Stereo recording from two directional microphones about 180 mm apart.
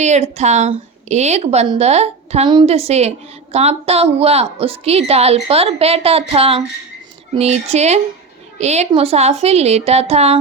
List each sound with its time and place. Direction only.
0.0 s a woman's voice: 40° right (ahead or behind)